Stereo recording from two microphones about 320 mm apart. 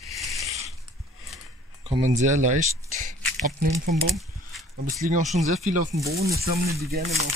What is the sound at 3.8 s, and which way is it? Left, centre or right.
Speech, right.